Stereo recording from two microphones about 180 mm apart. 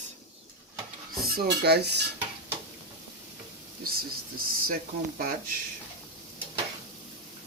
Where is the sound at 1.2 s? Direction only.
60° right (ahead or behind).